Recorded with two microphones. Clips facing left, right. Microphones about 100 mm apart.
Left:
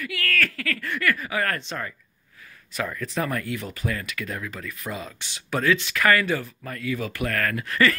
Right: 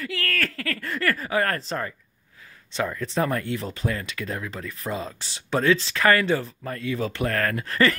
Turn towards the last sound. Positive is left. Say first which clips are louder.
# even
turn(degrees=-30)  # may be behind; listen again after turning